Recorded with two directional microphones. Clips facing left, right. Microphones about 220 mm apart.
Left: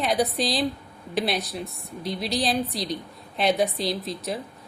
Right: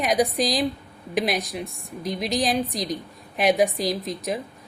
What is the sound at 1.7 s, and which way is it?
Speech, 45° right (ahead or behind).